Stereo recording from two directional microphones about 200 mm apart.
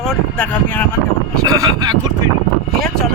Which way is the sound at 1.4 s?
20° right (ahead or behind).